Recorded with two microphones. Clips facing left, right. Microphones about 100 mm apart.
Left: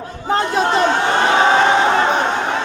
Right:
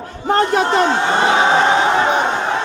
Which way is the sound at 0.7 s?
5° right (ahead or behind).